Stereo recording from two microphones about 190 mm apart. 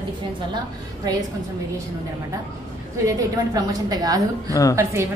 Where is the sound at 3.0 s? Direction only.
20° right (ahead or behind).